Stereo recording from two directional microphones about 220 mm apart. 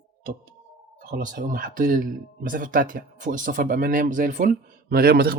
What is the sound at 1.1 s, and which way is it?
Speech, 40° right (ahead or behind).